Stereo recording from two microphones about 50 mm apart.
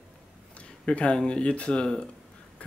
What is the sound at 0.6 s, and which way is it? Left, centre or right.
Speech, centre.